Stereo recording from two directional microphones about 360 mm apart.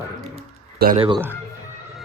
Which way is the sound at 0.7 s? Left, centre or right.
Centre.